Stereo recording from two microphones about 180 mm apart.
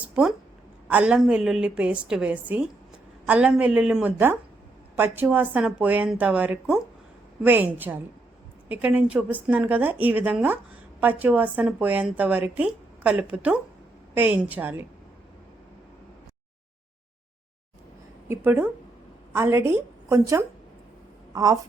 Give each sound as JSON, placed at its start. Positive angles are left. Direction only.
{"t": 0.2, "sound": "a woman's voice", "side_deg": -5}
{"t": 18.3, "sound": "a woman's voice", "side_deg": -10}